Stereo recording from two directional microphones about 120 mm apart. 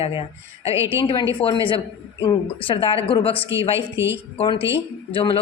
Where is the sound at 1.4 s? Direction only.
45° left (ahead or behind).